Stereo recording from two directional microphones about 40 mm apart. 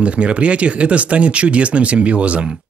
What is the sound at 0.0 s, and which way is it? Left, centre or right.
Speech, right.